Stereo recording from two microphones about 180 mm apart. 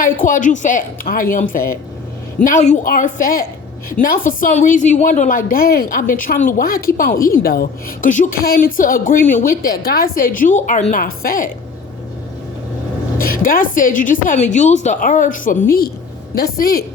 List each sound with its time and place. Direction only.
0.0 s a woman's voice: 50° left (ahead or behind)
13.1 s a woman's voice: 50° left (ahead or behind)